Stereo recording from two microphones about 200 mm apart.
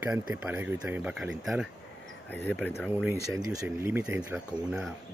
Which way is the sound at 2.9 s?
10° right (ahead or behind).